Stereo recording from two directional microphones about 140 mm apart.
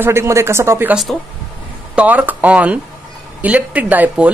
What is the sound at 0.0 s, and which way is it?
Speech, 20° right (ahead or behind).